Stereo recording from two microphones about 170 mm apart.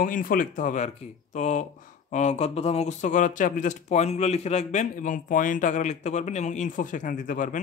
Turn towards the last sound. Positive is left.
turn(degrees=50)  # may be behind; listen again after turning